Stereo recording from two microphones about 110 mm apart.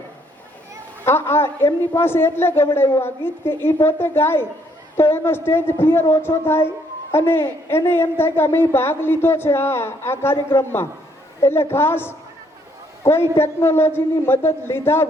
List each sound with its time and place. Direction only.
1.0 s a woman's voice: 20° left (ahead or behind)